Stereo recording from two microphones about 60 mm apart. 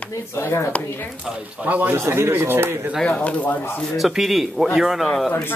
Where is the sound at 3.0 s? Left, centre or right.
Left.